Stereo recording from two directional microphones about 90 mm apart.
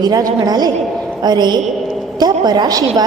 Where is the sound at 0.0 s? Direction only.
45° right (ahead or behind).